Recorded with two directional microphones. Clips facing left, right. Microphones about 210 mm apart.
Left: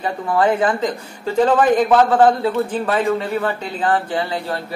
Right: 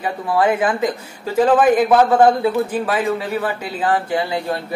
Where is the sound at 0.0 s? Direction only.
10° right (ahead or behind).